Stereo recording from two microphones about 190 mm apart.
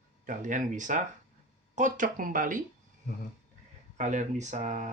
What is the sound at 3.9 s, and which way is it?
Speech, 40° right (ahead or behind).